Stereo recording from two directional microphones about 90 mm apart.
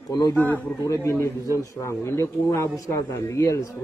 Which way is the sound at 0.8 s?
35° left (ahead or behind).